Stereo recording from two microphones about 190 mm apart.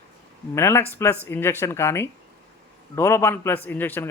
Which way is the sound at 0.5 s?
15° left (ahead or behind).